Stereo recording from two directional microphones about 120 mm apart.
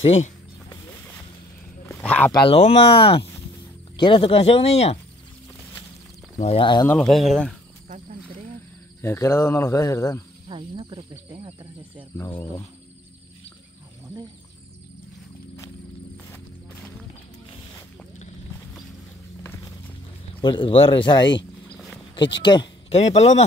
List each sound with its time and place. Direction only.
0.0 s speech: 60° left (ahead or behind)
2.0 s a sound: 10° left (ahead or behind)
2.3 s speech: 50° left (ahead or behind)
6.4 s speech: 55° left (ahead or behind)
7.0 s speech: centre (ahead or behind)
9.0 s speech: 20° left (ahead or behind)
10.5 s speech: 45° right (ahead or behind)
16.3 s a sound: 10° left (ahead or behind)
19.4 s music: 20° left (ahead or behind)
20.4 s speech: 45° left (ahead or behind)
21.7 s a sound: centre (ahead or behind)
22.1 s speech: 40° left (ahead or behind)
22.8 s speech: 60° left (ahead or behind)